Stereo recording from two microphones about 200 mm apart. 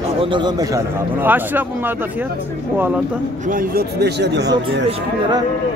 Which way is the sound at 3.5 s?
45° right (ahead or behind).